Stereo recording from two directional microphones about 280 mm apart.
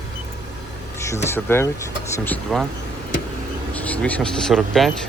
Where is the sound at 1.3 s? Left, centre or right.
Centre.